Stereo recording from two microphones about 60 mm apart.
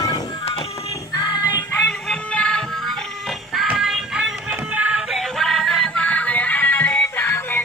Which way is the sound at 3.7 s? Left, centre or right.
Centre.